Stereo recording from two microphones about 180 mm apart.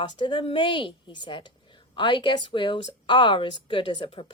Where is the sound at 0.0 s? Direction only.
25° left (ahead or behind).